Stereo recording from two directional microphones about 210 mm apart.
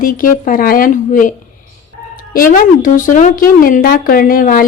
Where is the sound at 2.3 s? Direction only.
45° left (ahead or behind).